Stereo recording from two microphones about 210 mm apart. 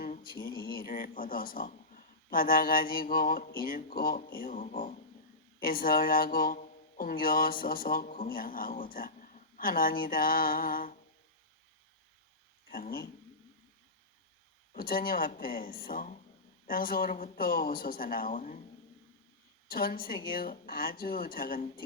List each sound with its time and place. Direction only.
0.5 s a sound: 20° left (ahead or behind)
0.8 s speech: 40° left (ahead or behind)
12.7 s speech: 45° left (ahead or behind)
14.7 s speech: 45° left (ahead or behind)
19.6 s speech: 45° left (ahead or behind)